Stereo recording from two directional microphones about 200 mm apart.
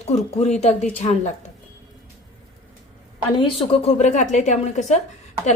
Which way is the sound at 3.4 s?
30° left (ahead or behind).